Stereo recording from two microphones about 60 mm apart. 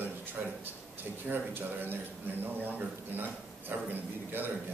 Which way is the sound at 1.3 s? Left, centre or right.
Right.